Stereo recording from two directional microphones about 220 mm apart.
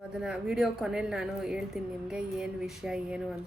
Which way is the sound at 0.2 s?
Centre (ahead or behind).